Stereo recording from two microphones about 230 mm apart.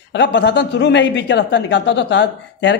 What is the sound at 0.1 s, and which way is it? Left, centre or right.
A man's voice, left.